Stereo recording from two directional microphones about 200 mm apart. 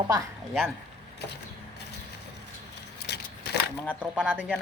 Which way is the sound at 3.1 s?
55° left (ahead or behind).